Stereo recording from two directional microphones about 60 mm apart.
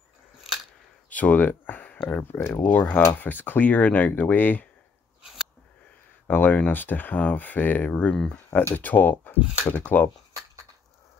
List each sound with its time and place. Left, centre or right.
1.1 s speech: left
5.2 s a sound: centre
6.2 s speech: left
8.5 s speech: left
8.7 s speech: left